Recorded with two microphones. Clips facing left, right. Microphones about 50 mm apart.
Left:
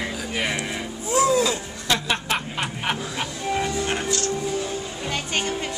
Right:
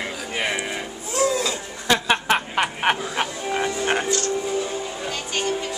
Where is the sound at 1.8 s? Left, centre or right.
Right.